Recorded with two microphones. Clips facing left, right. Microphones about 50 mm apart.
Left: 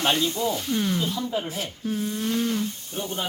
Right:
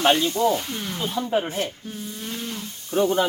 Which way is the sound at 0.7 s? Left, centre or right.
Centre.